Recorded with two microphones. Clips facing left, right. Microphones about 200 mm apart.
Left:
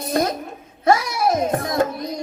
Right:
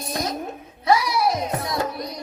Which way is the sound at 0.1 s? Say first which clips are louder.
Left 7 dB; 55° left (ahead or behind).